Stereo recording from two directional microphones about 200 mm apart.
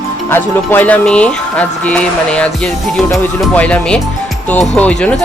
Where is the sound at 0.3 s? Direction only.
10° left (ahead or behind).